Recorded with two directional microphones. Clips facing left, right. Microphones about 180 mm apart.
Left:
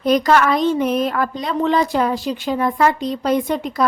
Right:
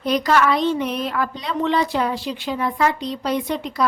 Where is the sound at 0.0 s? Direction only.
45° left (ahead or behind).